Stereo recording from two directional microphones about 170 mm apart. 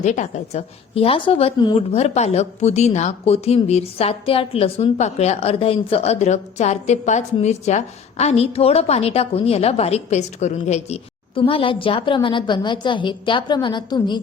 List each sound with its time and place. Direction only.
0.0 s a woman's voice: 45° left (ahead or behind); by 14.2 s 25° left (ahead or behind)